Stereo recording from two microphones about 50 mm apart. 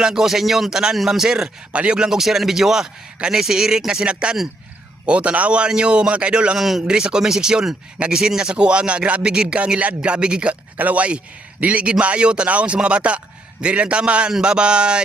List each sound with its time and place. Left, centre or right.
0.0 s a man's voice: centre
1.7 s speech: right
2.0 s a man's voice: centre
6.6 s a man's voice: centre
10.5 s speech: right